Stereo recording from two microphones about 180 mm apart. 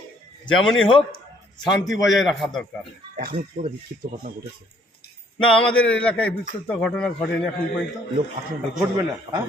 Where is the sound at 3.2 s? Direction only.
55° right (ahead or behind).